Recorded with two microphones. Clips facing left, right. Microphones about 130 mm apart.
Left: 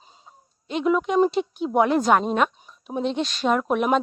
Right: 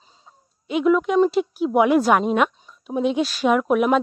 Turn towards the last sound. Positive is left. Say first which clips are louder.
# right 3 dB
turn(degrees=-5)  # may be behind; listen again after turning